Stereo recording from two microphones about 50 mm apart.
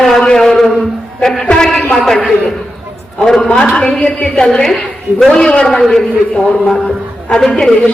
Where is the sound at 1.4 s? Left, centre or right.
Centre.